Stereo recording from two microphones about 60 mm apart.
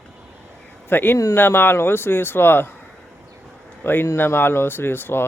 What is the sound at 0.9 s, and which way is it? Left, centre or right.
Speech, left.